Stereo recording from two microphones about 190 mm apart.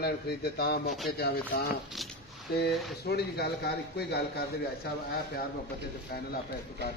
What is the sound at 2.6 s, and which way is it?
Speech, 55° left (ahead or behind).